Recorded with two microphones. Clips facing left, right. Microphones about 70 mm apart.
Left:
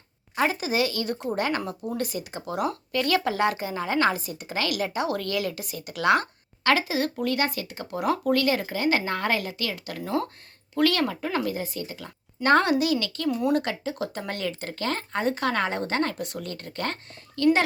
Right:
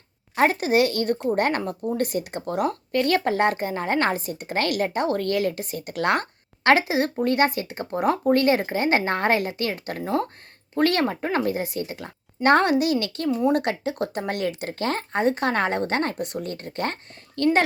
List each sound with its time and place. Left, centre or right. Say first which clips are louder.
0.3 s speech: right 5 dB; right
11.6 s speech: right 4 dB; right
13.2 s speech: right 4 dB; right
13.5 s speech: right 2 dB; right